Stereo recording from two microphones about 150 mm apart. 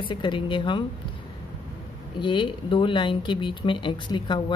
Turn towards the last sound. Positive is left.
turn(degrees=30)  # may be behind; listen again after turning